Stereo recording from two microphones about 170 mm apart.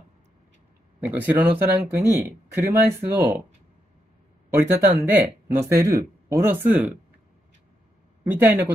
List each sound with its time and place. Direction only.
1.0 s speech: 10° right (ahead or behind)
2.1 s speech: 15° right (ahead or behind)
4.5 s speech: 15° right (ahead or behind)
8.2 s speech: 10° right (ahead or behind)